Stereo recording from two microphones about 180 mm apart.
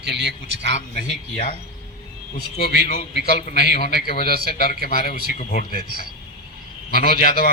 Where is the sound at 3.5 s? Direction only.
65° right (ahead or behind).